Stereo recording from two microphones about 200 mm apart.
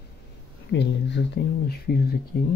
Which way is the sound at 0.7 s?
60° left (ahead or behind).